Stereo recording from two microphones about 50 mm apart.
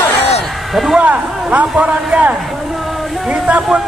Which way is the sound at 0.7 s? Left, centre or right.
Centre.